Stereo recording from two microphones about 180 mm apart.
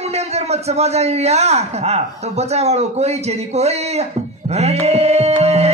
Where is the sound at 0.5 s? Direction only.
35° right (ahead or behind).